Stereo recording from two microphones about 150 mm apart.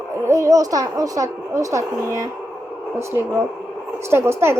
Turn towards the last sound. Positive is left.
turn(degrees=-15)  # may be behind; listen again after turning